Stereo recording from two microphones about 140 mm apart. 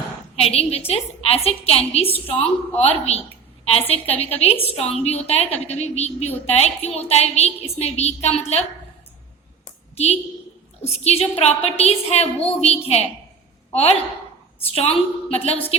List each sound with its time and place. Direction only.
0.3 s a woman's voice: 45° left (ahead or behind)
10.8 s a woman's voice: 45° left (ahead or behind)
15.3 s a woman's voice: 45° left (ahead or behind)